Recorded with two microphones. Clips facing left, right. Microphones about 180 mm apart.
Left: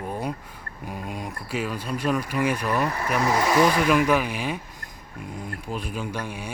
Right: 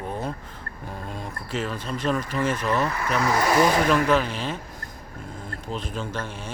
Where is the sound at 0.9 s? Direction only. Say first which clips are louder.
Left 2 dB; 10° left (ahead or behind).